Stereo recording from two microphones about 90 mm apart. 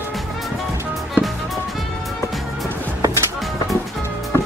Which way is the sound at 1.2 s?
20° right (ahead or behind).